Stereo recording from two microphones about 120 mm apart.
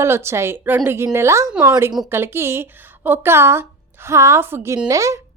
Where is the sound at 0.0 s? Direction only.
20° right (ahead or behind).